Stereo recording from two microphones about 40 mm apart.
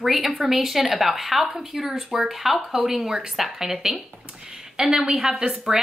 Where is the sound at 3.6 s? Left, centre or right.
Centre.